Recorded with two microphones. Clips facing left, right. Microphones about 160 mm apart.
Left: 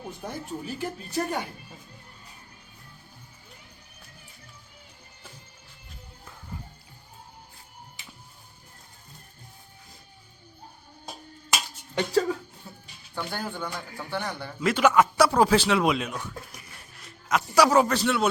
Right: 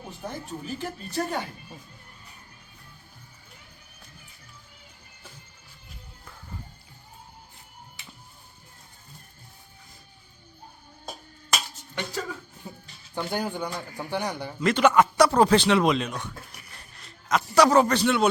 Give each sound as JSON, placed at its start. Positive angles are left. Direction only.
{"t": 0.3, "sound": "speech", "side_deg": 10}
{"t": 12.7, "sound": "music", "side_deg": -15}
{"t": 13.1, "sound": "speech", "side_deg": -15}
{"t": 14.6, "sound": "speech", "side_deg": 5}
{"t": 16.7, "sound": "a sound", "side_deg": 10}